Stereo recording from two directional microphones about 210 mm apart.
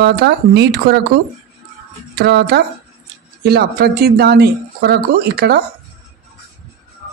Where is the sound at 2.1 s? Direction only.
50° right (ahead or behind).